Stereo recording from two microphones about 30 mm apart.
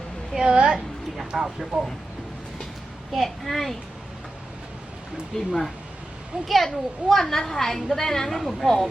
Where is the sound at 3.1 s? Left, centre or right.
Centre.